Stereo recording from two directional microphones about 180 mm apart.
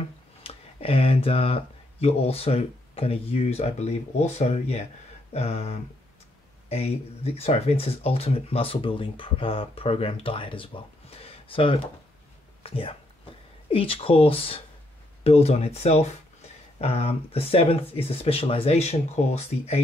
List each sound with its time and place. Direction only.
0.4 s speech: 30° left (ahead or behind)